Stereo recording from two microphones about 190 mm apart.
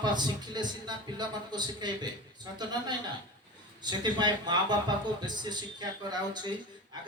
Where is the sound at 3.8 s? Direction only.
20° right (ahead or behind).